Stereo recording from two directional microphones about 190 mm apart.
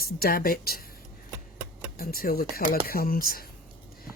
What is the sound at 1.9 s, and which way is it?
Speech, 50° left (ahead or behind).